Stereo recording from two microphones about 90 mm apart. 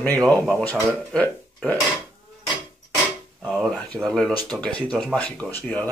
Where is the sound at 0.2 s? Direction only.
10° left (ahead or behind).